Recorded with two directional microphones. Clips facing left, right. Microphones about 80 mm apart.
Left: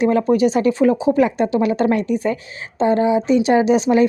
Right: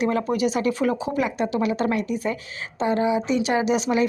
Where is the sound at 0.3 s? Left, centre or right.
Left.